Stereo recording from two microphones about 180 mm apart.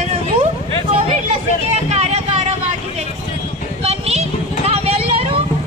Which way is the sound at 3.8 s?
35° right (ahead or behind).